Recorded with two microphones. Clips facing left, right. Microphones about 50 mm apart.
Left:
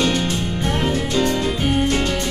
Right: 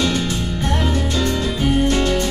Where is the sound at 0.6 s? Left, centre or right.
Left.